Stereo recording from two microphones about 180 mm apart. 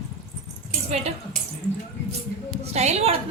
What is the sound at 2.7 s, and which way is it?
Speech, 35° right (ahead or behind).